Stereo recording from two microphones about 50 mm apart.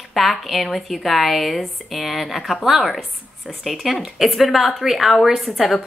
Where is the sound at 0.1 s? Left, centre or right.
Centre.